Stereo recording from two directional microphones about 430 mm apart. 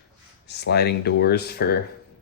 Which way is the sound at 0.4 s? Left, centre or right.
Left.